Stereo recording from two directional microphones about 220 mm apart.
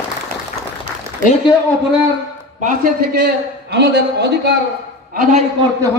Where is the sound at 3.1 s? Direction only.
50° right (ahead or behind).